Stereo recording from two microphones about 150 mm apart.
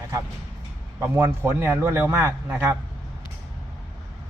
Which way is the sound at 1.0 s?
15° right (ahead or behind).